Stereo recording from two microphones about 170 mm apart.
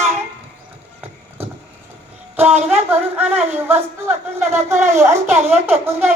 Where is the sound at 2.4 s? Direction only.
10° right (ahead or behind).